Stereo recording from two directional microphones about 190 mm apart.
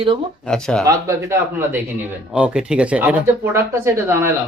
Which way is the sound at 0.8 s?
15° right (ahead or behind).